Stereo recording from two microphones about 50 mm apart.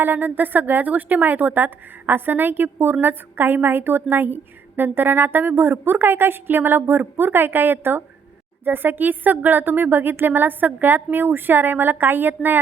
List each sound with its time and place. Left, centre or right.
0.0 s a woman's voice: right